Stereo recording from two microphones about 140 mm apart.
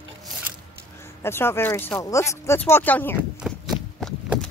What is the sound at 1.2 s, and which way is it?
Speech, 15° left (ahead or behind).